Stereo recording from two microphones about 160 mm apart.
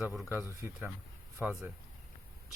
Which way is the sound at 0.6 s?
10° right (ahead or behind).